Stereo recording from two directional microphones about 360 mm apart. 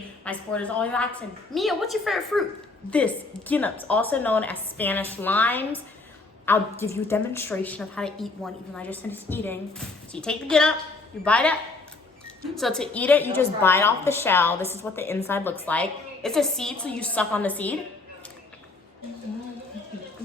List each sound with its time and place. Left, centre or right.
0.3 s a woman's voice: centre
12.5 s a woman's voice: centre